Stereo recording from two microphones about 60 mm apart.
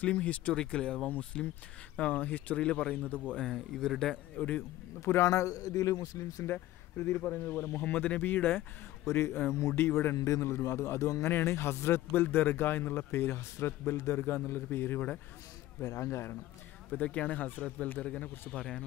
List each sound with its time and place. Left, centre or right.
0.0 s speech: left
3.3 s speech: centre
4.4 s speech: left
5.0 s speech: left
6.4 s speech: left
9.5 s a man's voice: left
10.1 s speech: left
10.4 s a man's voice: left
12.2 s speech: left
15.8 s a man's voice: left
16.9 s speech: left